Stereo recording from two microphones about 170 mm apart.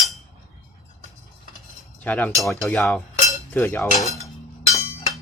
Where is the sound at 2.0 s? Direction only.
10° left (ahead or behind).